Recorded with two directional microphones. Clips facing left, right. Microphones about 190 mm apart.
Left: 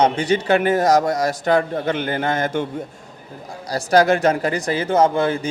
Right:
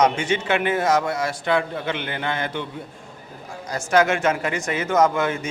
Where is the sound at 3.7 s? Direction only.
35° left (ahead or behind).